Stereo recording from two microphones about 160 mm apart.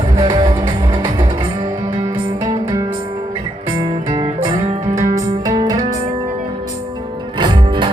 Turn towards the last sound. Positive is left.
turn(degrees=-30)  # may be behind; listen again after turning